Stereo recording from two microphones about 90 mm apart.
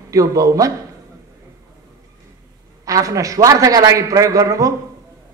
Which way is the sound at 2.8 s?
40° right (ahead or behind).